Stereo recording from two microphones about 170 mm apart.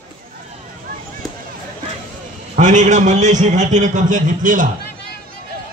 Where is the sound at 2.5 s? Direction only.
45° right (ahead or behind).